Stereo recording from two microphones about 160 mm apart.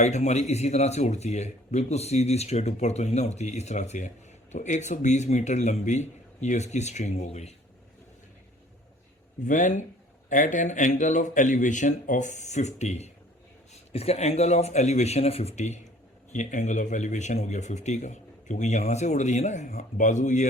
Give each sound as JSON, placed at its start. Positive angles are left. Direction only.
{"t": 0.0, "sound": "speech", "side_deg": 45}
{"t": 9.4, "sound": "speech", "side_deg": 50}